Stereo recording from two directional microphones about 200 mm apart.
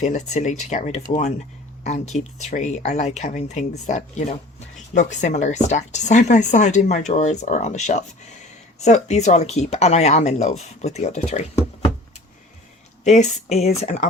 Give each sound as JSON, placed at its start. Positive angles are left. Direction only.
{"t": 0.0, "sound": "speech", "side_deg": 35}
{"t": 13.1, "sound": "speech", "side_deg": 35}